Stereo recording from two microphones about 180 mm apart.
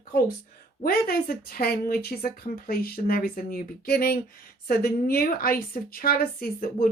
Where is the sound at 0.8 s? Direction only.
55° left (ahead or behind).